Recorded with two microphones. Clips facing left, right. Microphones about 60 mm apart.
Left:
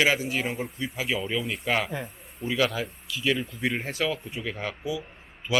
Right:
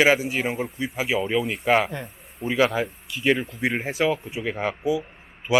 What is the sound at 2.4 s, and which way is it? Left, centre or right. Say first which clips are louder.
Speech: right 5 dB; right.